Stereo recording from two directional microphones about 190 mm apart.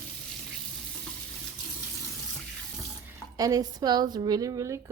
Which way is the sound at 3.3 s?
20° right (ahead or behind).